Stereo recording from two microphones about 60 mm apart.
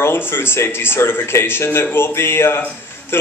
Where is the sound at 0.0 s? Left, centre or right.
Left.